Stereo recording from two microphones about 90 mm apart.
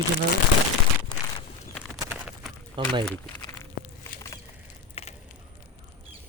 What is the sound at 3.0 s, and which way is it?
Speech, 10° left (ahead or behind).